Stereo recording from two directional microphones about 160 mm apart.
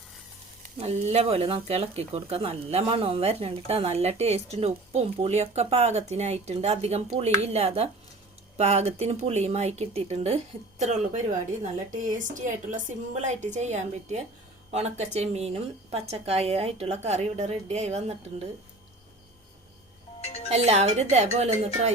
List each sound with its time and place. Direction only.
0.8 s speech: 40° right (ahead or behind)
20.2 s speech: 40° left (ahead or behind)
20.5 s speech: 45° right (ahead or behind)